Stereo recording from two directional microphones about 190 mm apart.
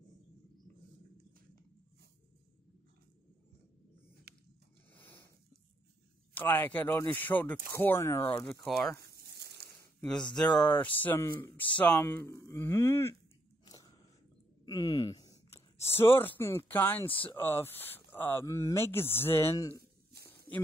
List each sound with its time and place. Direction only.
4.3 s a sound: 55° right (ahead or behind)
4.9 s zipper: 10° left (ahead or behind)
6.3 s speech: 10° left (ahead or behind)
8.6 s speech: centre (ahead or behind)
8.9 s a sound: 60° right (ahead or behind)
9.9 s speech: 5° left (ahead or behind)
13.7 s biting: 20° left (ahead or behind)
14.6 s speech: 20° left (ahead or behind)